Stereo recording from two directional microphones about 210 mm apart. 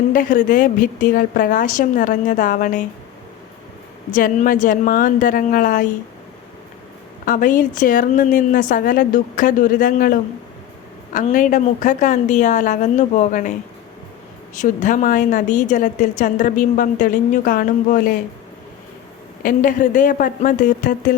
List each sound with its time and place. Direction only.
0.1 s a woman's voice: 40° left (ahead or behind)
4.1 s a woman's voice: 40° left (ahead or behind)
7.3 s a woman's voice: 40° left (ahead or behind)
19.4 s a woman's voice: 40° left (ahead or behind)